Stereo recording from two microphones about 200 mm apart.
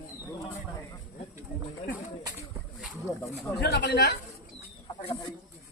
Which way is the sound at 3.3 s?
55° left (ahead or behind).